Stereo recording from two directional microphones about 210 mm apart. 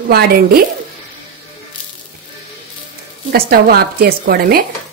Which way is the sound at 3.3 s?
45° right (ahead or behind).